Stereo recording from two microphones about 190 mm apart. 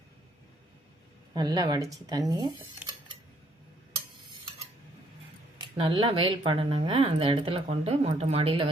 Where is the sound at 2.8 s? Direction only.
5° right (ahead or behind).